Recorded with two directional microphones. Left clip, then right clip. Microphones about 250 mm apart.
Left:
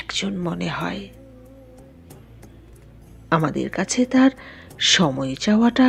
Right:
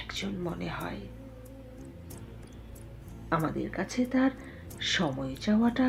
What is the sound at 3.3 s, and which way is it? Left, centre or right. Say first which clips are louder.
Speech: left 9 dB; left.